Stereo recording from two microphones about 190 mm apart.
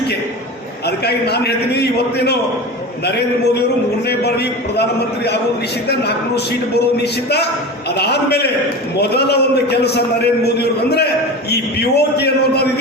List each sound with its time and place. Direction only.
0.9 s a man's voice: 60° left (ahead or behind)